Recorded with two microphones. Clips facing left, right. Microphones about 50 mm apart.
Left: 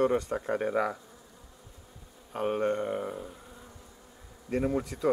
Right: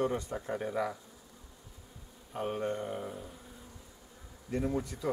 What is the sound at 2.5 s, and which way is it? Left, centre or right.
Speech, left.